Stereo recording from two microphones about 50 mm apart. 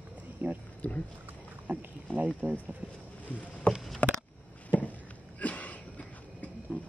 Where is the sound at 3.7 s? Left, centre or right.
Left.